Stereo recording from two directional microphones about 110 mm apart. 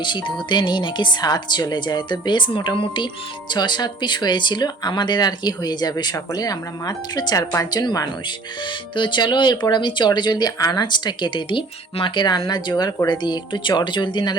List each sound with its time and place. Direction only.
0.0 s speech: 45° left (ahead or behind)